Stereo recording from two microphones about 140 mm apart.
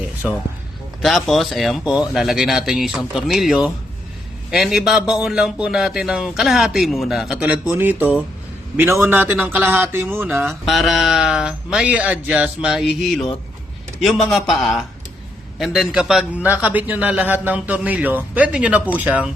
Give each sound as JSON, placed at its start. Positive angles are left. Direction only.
{"t": 0.2, "sound": "a man's voice", "side_deg": -5}
{"t": 10.7, "sound": "a man's voice", "side_deg": 0}